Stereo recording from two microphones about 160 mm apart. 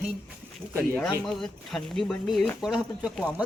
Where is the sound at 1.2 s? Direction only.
Centre (ahead or behind).